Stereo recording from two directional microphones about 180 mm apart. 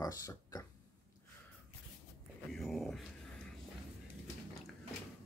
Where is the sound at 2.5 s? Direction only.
Centre (ahead or behind).